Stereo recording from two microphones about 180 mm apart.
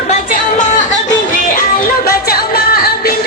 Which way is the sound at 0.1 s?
45° left (ahead or behind).